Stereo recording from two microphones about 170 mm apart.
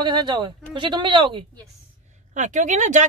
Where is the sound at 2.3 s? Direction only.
45° right (ahead or behind).